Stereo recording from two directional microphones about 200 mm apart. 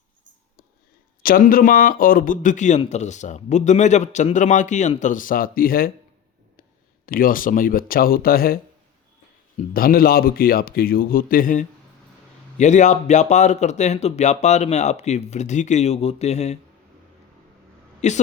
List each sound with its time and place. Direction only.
1.2 s a man's voice: 45° left (ahead or behind)
18.0 s a man's voice: 35° left (ahead or behind)